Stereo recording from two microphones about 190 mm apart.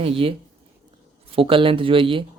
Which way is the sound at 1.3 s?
30° right (ahead or behind).